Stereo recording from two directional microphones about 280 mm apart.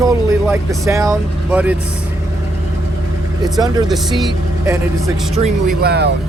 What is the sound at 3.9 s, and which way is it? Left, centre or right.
Speech, centre.